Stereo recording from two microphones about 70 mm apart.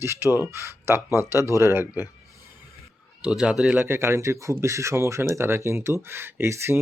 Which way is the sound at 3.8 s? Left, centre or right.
Right.